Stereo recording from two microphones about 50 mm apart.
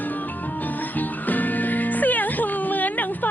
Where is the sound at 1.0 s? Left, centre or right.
Left.